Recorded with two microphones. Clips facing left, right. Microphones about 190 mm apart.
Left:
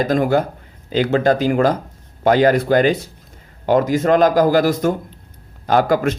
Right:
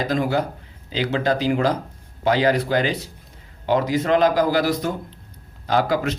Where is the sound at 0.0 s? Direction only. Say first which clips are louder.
Left 5 dB; 50° left (ahead or behind).